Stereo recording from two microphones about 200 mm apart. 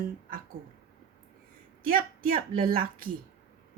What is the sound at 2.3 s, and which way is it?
Speech, 45° right (ahead or behind).